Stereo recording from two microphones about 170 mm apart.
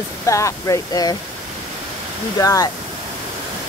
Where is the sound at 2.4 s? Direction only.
20° left (ahead or behind).